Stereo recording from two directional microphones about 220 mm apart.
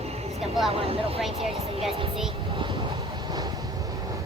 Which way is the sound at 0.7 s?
25° right (ahead or behind).